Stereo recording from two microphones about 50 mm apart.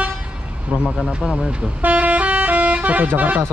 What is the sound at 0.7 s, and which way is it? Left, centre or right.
Speech, right.